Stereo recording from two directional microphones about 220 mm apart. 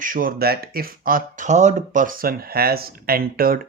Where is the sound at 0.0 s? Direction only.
40° right (ahead or behind).